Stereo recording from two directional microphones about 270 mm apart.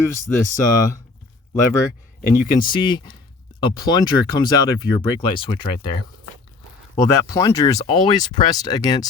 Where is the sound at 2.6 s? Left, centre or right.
Centre.